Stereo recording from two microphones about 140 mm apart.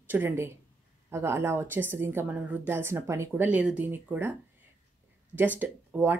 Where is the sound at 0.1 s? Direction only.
15° right (ahead or behind).